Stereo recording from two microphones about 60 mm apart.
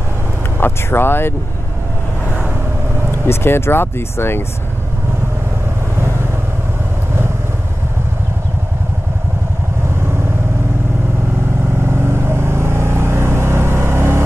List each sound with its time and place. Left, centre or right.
0.6 s speech: left
3.3 s speech: left
12.0 s vehicle: right